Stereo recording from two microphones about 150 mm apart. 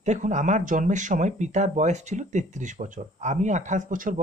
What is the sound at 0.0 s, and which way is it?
Speech, 55° right (ahead or behind).